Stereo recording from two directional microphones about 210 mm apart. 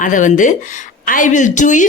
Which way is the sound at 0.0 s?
40° left (ahead or behind).